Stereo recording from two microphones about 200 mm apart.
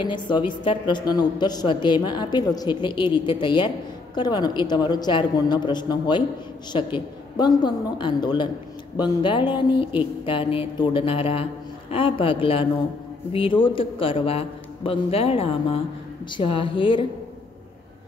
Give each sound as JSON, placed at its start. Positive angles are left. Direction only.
{"t": 0.0, "sound": "a woman's voice", "side_deg": 25}